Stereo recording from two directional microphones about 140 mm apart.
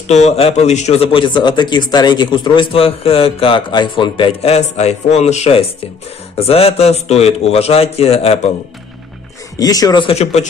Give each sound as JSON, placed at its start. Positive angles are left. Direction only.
{"t": 0.1, "sound": "a man's voice", "side_deg": 55}
{"t": 9.6, "sound": "a man's voice", "side_deg": 25}
{"t": 10.0, "sound": "a man's voice", "side_deg": 50}